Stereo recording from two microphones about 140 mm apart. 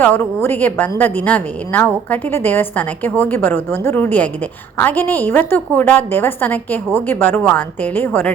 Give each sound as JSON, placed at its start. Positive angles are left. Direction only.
{"t": 0.0, "sound": "a woman's voice", "side_deg": 15}